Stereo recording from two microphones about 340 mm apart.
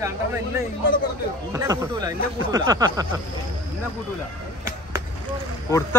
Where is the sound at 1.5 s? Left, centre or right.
Centre.